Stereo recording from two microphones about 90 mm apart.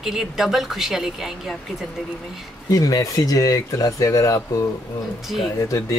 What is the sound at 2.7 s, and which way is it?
Speech, 40° left (ahead or behind).